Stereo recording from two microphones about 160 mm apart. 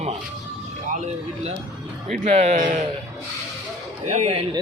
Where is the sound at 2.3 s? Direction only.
45° right (ahead or behind).